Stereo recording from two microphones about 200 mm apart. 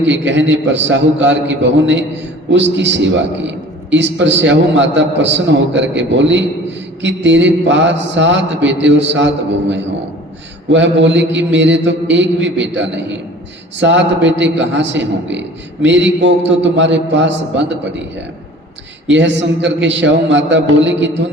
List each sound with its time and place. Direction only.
0.0 s a man's voice: 65° right (ahead or behind)
19.0 s a man's voice: 65° right (ahead or behind)